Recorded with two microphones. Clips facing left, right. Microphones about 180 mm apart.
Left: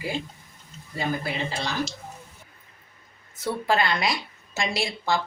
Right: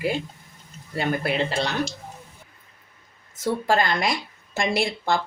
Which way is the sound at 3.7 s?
45° right (ahead or behind).